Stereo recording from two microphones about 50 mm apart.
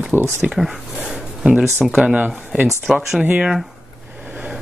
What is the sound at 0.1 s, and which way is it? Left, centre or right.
Speech, right.